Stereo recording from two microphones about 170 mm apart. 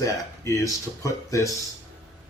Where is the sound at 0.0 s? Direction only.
20° left (ahead or behind).